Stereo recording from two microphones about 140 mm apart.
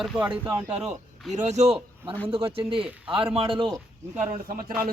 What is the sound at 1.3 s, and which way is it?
Speech, 55° right (ahead or behind).